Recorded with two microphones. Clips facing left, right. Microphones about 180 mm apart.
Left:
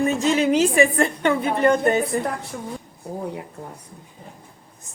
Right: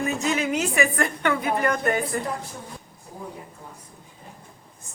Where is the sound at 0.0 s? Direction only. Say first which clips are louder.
Left 6 dB; 30° left (ahead or behind).